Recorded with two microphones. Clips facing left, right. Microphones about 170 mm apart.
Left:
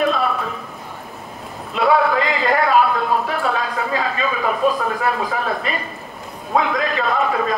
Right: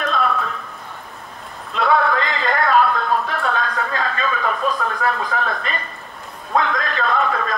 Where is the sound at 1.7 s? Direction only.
5° left (ahead or behind).